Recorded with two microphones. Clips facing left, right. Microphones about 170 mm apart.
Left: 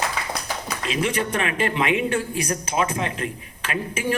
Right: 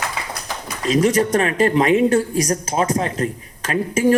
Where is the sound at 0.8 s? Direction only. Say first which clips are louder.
Right 9 dB; 40° right (ahead or behind).